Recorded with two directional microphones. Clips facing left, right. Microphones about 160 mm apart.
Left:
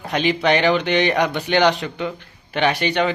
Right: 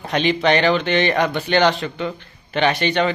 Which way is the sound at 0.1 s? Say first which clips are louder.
Right 1 dB; 10° left (ahead or behind).